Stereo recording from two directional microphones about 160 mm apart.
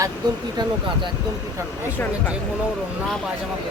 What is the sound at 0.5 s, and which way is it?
Speech, 25° right (ahead or behind).